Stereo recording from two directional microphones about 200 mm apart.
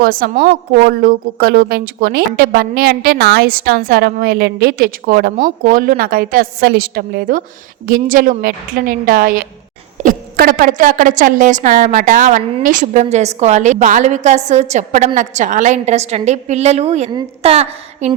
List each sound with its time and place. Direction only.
0.0 s a woman's voice: 45° right (ahead or behind); by 18.1 s 30° right (ahead or behind)